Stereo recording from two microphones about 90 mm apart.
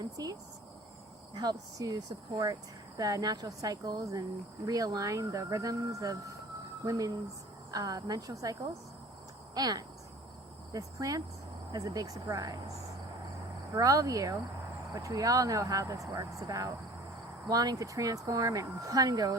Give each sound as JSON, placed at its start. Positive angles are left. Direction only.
{"t": 0.0, "sound": "speech", "side_deg": -45}
{"t": 9.6, "sound": "speech", "side_deg": -50}
{"t": 13.7, "sound": "speech", "side_deg": -40}